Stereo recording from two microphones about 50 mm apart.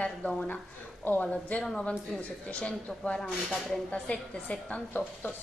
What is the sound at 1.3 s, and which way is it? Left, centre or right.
Speech, centre.